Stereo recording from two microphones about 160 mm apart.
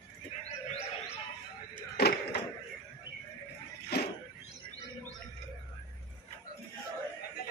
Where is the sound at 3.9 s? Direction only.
90° left.